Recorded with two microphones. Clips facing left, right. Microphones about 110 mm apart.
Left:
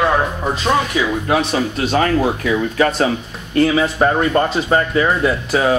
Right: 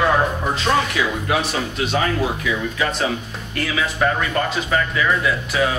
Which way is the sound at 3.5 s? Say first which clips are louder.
Left 8 dB; 30° left (ahead or behind).